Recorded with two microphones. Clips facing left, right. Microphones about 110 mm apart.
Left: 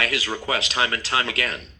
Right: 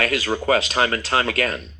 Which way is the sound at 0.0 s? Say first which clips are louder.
Right 5 dB; 45° right (ahead or behind).